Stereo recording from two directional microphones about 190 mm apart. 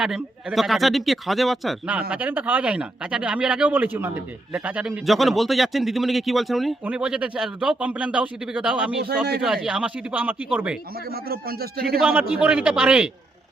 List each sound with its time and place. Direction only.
0.0 s a man's voice: 5° right (ahead or behind)
11.1 s a man's voice: 55° right (ahead or behind)
11.9 s a man's voice: 5° right (ahead or behind)